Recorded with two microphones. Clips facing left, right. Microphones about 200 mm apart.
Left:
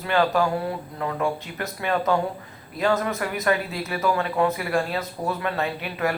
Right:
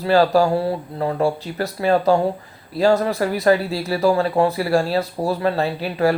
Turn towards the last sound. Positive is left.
turn(degrees=-35)  # may be behind; listen again after turning